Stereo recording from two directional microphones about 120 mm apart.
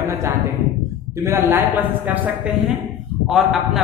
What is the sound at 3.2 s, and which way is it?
Speech, centre (ahead or behind).